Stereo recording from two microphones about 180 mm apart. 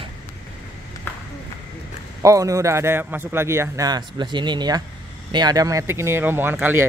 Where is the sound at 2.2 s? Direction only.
15° right (ahead or behind).